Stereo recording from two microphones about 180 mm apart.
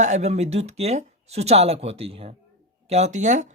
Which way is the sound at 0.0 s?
40° right (ahead or behind).